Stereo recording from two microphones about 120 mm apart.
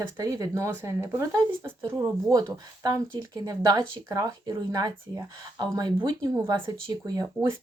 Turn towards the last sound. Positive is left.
turn(degrees=-35)  # may be behind; listen again after turning